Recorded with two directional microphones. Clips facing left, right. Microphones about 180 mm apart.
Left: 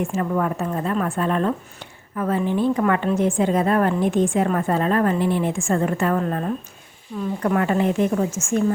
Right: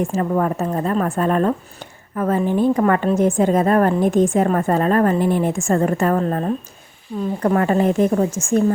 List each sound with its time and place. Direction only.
0.0 s a woman's voice: 35° right (ahead or behind)
7.4 s a woman's voice: 40° right (ahead or behind)